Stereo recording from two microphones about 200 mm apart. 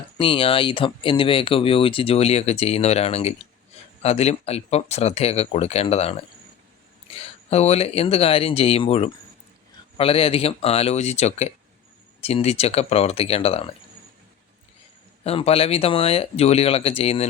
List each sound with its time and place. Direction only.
0.2 s speech: 25° left (ahead or behind)
7.2 s speech: 30° left (ahead or behind)
15.2 s speech: 30° left (ahead or behind)